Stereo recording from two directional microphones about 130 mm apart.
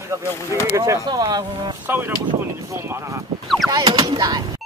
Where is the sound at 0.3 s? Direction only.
20° left (ahead or behind).